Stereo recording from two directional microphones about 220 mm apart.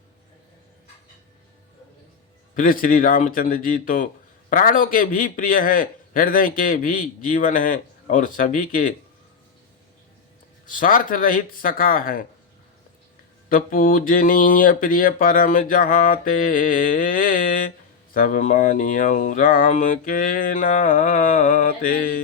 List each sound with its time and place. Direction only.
2.6 s speech: 40° left (ahead or behind)
10.7 s speech: 40° left (ahead or behind)
13.5 s speech: 40° left (ahead or behind)